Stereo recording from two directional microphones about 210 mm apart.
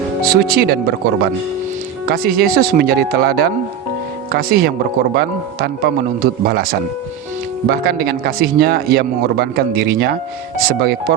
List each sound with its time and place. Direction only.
0.2 s speech: 45° right (ahead or behind)